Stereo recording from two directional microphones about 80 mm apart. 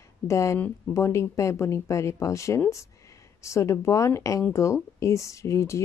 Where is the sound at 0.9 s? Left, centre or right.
Left.